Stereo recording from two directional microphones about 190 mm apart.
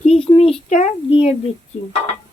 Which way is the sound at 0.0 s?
30° left (ahead or behind).